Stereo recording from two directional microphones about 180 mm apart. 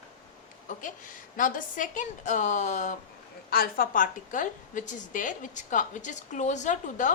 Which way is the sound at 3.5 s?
55° left (ahead or behind).